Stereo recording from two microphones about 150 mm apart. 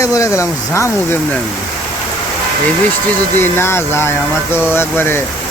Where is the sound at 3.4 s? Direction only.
15° left (ahead or behind).